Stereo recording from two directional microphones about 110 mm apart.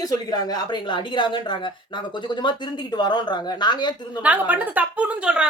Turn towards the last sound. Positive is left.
turn(degrees=-10)  # may be behind; listen again after turning